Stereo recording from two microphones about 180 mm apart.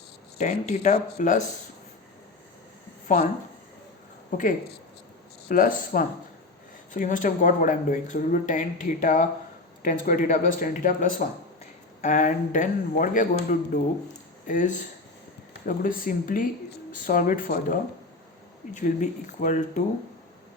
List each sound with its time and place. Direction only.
0.3 s speech: 40° left (ahead or behind)
4.3 s speech: 45° left (ahead or behind)